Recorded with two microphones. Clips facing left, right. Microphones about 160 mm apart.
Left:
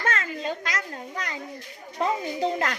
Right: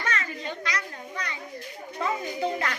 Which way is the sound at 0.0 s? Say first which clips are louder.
Left 3 dB; 45° left (ahead or behind).